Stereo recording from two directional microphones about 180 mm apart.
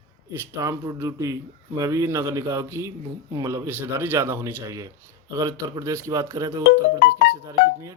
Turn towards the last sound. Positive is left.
turn(degrees=-20)  # may be behind; listen again after turning